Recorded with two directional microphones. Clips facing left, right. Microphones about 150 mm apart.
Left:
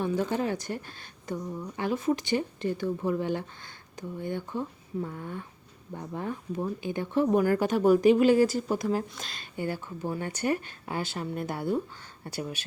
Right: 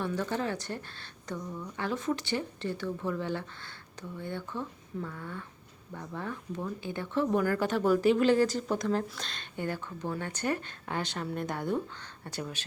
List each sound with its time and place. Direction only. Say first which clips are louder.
0.0 s speech: left 4 dB; 15° left (ahead or behind)